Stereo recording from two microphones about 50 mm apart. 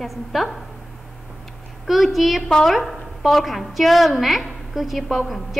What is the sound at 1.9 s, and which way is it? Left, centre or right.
Speech, centre.